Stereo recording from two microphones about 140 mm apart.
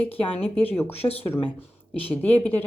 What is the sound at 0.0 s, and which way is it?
Speech, 10° left (ahead or behind).